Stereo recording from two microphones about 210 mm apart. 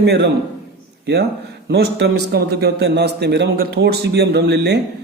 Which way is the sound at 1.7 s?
50° right (ahead or behind).